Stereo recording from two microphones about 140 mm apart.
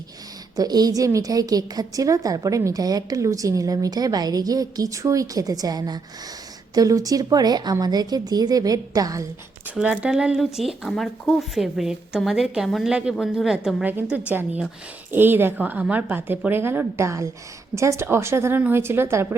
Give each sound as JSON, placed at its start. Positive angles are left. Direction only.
{"t": 0.5, "sound": "a woman's voice", "side_deg": -25}
{"t": 9.7, "sound": "a woman's voice", "side_deg": -10}